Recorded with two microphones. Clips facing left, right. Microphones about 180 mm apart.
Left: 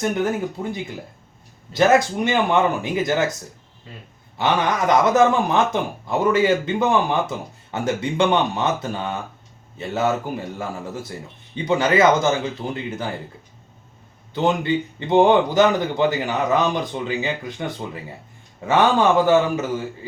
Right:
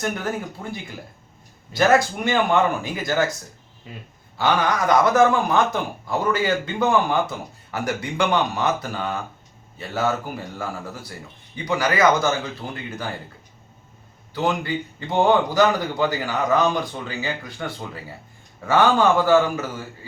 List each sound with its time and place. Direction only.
0.0 s a man's voice: 20° left (ahead or behind)
4.4 s a man's voice: 20° left (ahead or behind)
14.3 s a man's voice: 25° left (ahead or behind)